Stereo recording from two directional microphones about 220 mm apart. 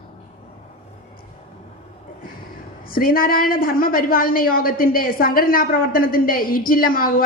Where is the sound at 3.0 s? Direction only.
40° left (ahead or behind).